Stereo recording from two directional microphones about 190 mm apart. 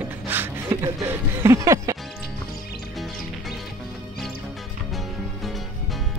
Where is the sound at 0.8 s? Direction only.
15° right (ahead or behind).